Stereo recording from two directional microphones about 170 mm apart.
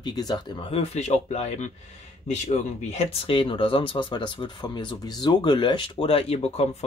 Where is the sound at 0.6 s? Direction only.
40° left (ahead or behind).